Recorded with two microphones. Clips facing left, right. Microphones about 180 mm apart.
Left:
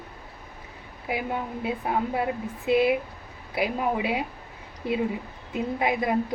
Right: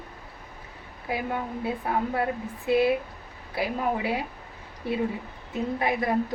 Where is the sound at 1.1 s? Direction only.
20° left (ahead or behind).